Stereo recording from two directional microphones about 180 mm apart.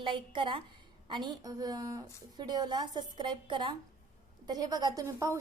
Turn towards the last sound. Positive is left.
turn(degrees=-15)  # may be behind; listen again after turning